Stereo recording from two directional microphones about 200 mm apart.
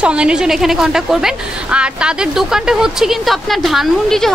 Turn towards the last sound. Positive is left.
turn(degrees=0)  # may be behind; listen again after turning